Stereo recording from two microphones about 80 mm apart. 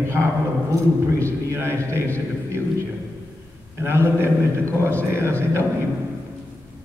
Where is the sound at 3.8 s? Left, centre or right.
Right.